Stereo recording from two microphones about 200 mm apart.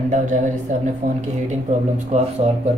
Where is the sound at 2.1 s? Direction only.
35° right (ahead or behind).